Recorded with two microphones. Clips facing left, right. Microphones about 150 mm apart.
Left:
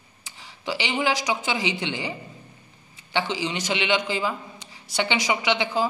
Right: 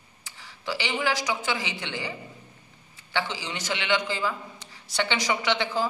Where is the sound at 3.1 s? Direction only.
20° left (ahead or behind).